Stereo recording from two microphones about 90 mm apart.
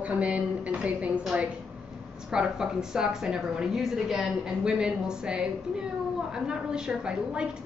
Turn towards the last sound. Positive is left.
turn(degrees=-10)  # may be behind; listen again after turning